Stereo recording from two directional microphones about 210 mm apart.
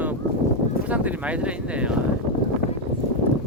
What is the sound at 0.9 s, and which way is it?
Speech, 5° right (ahead or behind).